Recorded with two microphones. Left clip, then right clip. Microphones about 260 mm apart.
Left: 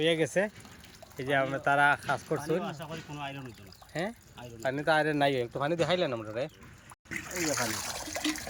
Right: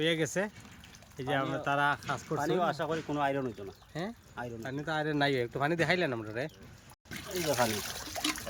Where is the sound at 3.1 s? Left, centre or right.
Right.